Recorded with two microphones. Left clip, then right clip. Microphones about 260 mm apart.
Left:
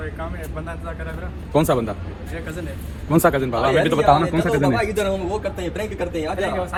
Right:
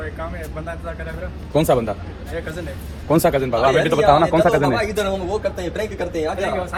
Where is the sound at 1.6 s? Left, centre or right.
Centre.